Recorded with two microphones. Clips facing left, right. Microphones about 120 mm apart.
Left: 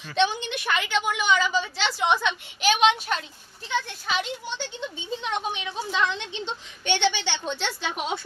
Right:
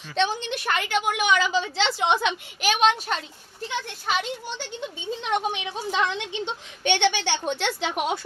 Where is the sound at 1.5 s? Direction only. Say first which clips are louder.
Right 2 dB; 20° right (ahead or behind).